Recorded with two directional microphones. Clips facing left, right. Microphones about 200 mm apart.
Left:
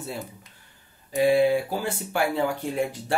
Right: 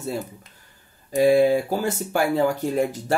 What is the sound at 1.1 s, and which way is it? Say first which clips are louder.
Speech: right 3 dB; 40° right (ahead or behind).